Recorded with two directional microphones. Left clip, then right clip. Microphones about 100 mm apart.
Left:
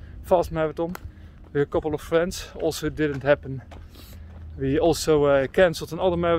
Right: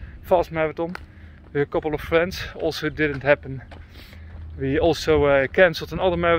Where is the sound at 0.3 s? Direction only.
45° left (ahead or behind).